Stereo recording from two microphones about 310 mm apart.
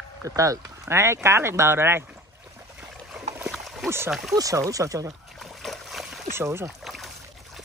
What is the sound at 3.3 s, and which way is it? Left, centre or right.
Rowboat, centre.